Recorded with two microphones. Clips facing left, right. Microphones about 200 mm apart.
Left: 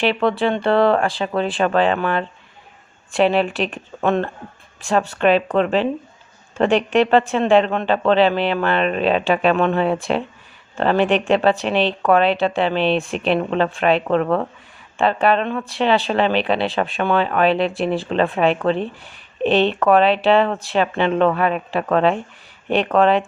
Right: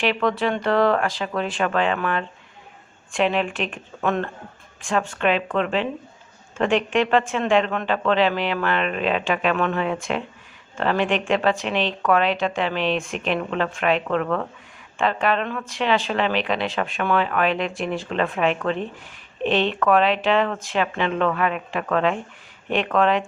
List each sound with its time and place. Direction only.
0.0 s speech: 30° left (ahead or behind)